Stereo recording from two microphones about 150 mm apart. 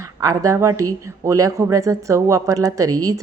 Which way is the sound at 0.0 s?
20° right (ahead or behind).